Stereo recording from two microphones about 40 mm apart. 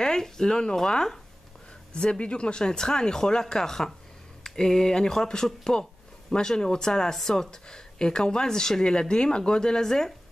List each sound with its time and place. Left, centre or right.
0.0 s speech: centre
2.0 s speech: left